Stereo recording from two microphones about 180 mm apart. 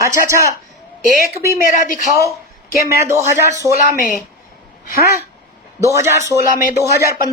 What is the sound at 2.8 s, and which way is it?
Speech, 15° right (ahead or behind).